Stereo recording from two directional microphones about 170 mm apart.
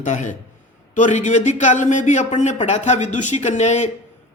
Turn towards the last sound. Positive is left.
turn(degrees=45)  # may be behind; listen again after turning